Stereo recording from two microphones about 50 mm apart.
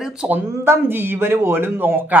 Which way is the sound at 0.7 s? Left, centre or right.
Right.